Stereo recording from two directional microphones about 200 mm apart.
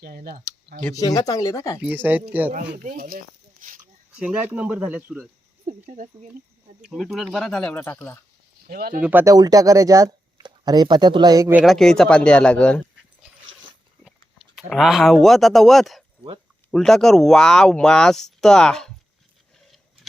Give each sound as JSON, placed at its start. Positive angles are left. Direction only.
{"t": 0.0, "sound": "speech", "side_deg": -50}
{"t": 0.9, "sound": "speech", "side_deg": 15}
{"t": 1.8, "sound": "speech", "side_deg": -10}
{"t": 2.5, "sound": "speech", "side_deg": -40}
{"t": 4.1, "sound": "speech", "side_deg": -5}
{"t": 5.6, "sound": "speech", "side_deg": -35}
{"t": 6.8, "sound": "speech", "side_deg": 0}
{"t": 8.6, "sound": "speech", "side_deg": -50}
{"t": 9.0, "sound": "speech", "side_deg": -10}
{"t": 11.6, "sound": "speech", "side_deg": 0}
{"t": 14.0, "sound": "speech", "side_deg": 0}